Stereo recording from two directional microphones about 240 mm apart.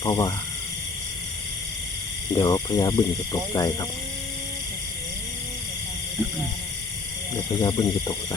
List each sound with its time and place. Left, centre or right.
0.0 s speech: centre
2.3 s speech: centre
7.6 s speech: centre